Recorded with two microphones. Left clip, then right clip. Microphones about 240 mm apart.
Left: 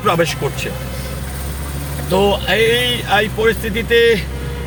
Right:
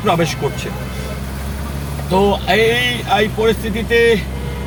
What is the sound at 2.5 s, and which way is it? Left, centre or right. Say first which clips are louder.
Speech: even; left.